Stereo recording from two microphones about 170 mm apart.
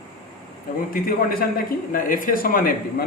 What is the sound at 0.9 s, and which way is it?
Speech, 60° left (ahead or behind).